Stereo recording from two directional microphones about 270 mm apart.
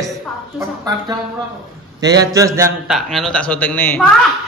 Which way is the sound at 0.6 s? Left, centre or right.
Centre.